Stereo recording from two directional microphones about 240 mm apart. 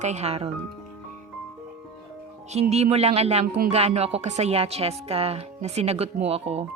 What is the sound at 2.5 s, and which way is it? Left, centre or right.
Speech, right.